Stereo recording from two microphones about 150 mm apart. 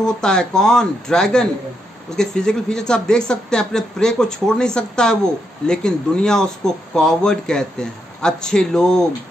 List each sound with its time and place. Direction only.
0.0 s speech: 5° left (ahead or behind)